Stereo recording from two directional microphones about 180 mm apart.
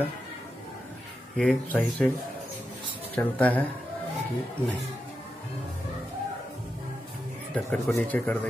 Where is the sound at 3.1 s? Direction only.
10° left (ahead or behind).